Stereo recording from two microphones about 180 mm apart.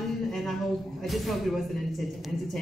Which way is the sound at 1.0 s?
Centre (ahead or behind).